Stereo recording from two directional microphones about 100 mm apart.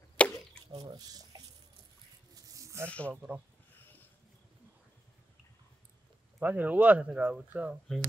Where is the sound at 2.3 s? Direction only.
35° right (ahead or behind).